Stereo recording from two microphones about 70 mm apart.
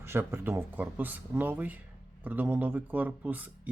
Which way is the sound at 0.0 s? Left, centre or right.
Right.